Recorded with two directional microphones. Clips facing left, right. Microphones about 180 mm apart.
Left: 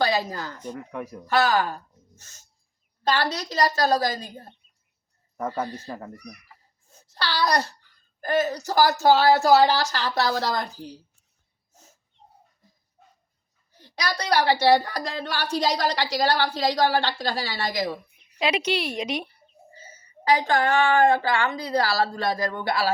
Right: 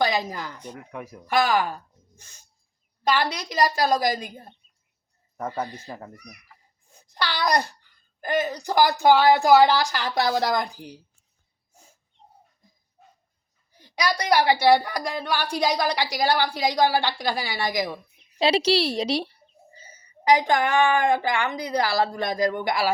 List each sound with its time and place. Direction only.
0.0 s a woman's voice: 15° right (ahead or behind)
0.7 s speech: 5° right (ahead or behind)
1.3 s a woman's voice: 10° right (ahead or behind)
2.1 s a sound: 15° right (ahead or behind)
3.0 s a woman's voice: 15° right (ahead or behind)
5.5 s a woman's voice: 15° right (ahead or behind)
6.8 s a sound: 15° right (ahead or behind)
8.2 s a woman's voice: 15° right (ahead or behind)
13.7 s a woman's voice: 10° right (ahead or behind)
18.3 s a woman's voice: 30° right (ahead or behind)
19.9 s a woman's voice: 15° right (ahead or behind)